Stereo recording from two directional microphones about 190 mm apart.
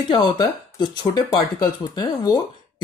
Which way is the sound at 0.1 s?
25° left (ahead or behind).